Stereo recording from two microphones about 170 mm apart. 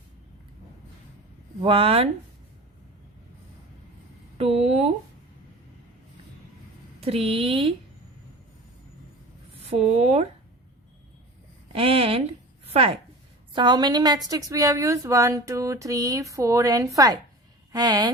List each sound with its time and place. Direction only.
1.6 s speech: 35° right (ahead or behind)
4.4 s a sound: 35° right (ahead or behind)
7.0 s speech: 35° right (ahead or behind)
9.6 s speech: 35° right (ahead or behind)
11.7 s a woman's voice: 35° right (ahead or behind)